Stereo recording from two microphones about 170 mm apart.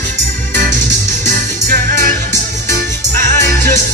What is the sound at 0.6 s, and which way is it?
Music, 45° right (ahead or behind).